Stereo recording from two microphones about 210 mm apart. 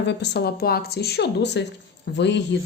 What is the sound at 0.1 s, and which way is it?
Speech, 55° left (ahead or behind).